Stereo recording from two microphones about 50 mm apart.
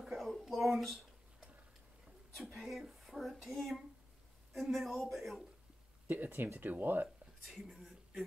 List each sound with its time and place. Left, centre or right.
0.0 s a sound: centre
0.5 s speech: centre
2.3 s speech: centre
6.0 s speech: right
7.4 s speech: centre